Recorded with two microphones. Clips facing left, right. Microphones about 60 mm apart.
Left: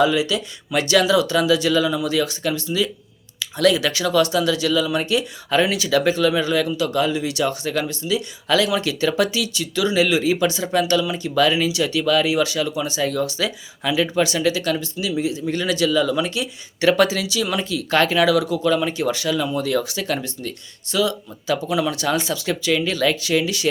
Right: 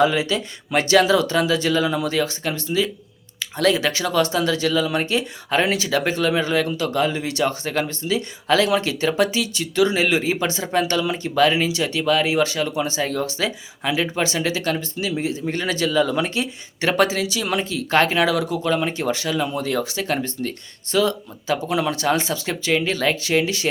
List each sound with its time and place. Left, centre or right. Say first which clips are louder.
0.0 s speech: even; right